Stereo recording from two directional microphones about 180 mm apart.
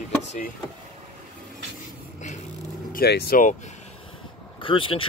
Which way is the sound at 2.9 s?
60° left (ahead or behind).